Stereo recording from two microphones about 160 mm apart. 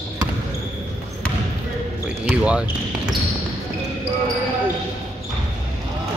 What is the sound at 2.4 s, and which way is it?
Speech, 5° right (ahead or behind).